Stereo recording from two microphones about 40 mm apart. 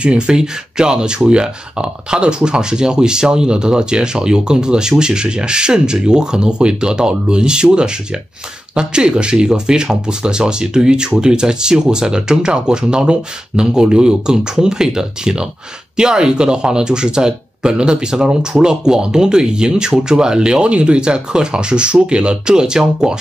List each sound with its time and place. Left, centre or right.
0.0 s speech: right